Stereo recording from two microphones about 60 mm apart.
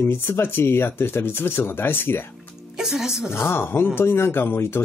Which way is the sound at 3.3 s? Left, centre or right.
Left.